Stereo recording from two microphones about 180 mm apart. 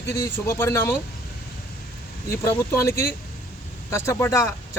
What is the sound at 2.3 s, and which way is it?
Speech, 15° left (ahead or behind).